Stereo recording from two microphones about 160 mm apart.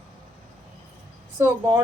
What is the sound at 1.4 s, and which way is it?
Speech, 15° right (ahead or behind).